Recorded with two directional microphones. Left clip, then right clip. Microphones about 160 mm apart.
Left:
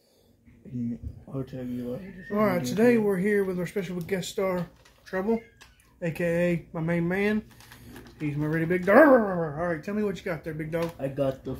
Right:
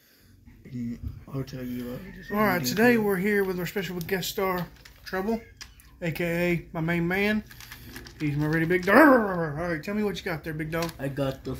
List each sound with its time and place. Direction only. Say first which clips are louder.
1.3 s speech: left 1 dB; 20° left (ahead or behind)
2.2 s speech: right 1 dB; 5° right (ahead or behind)
11.0 s speech: left 2 dB; 15° left (ahead or behind)